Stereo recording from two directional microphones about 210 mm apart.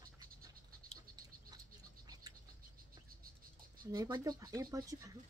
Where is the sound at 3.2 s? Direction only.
45° right (ahead or behind).